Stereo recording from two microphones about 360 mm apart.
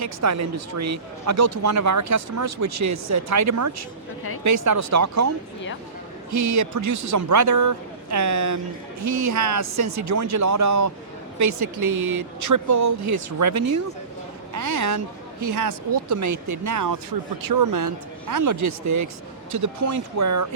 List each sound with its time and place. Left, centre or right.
0.0 s speech: right
6.5 s speech: right
15.4 s speech: right